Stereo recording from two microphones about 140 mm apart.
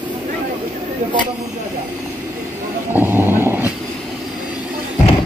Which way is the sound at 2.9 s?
15° right (ahead or behind).